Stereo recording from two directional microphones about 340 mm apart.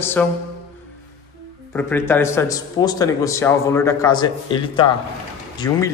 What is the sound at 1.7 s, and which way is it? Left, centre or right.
Speech, centre.